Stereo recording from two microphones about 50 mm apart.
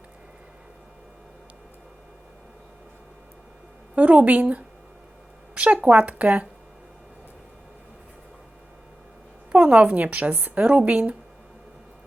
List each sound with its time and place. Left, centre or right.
3.9 s a woman's voice: right
9.5 s a woman's voice: right